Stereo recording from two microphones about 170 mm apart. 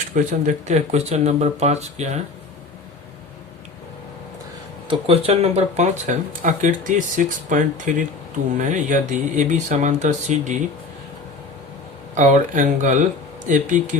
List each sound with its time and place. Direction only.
0.1 s speech: 50° right (ahead or behind)
4.9 s speech: 35° right (ahead or behind)
12.1 s speech: 45° right (ahead or behind)